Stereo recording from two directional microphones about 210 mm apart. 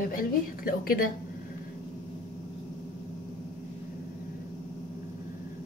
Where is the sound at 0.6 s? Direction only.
45° left (ahead or behind).